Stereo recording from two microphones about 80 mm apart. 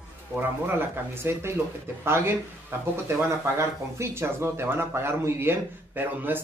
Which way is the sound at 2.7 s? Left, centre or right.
Right.